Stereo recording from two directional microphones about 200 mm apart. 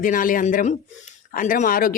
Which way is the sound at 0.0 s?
45° left (ahead or behind).